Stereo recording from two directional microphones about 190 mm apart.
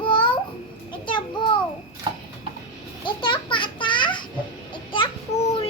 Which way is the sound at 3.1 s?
25° left (ahead or behind).